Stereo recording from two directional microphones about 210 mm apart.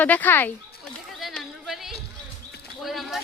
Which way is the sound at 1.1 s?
Centre (ahead or behind).